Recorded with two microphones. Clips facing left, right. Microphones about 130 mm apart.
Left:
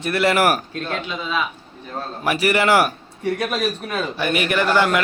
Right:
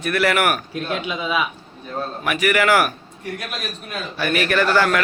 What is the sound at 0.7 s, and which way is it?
Speech, 15° right (ahead or behind).